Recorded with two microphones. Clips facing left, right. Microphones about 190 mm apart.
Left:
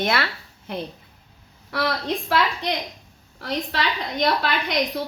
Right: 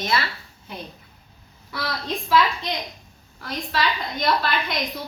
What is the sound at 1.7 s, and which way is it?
A woman's voice, 65° left (ahead or behind).